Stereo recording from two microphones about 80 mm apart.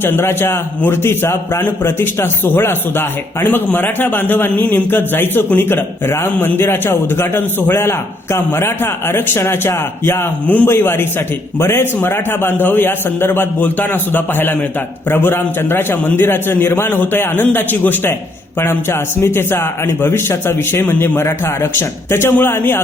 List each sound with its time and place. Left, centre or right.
0.0 s a man's voice: left
10.4 s a man's voice: centre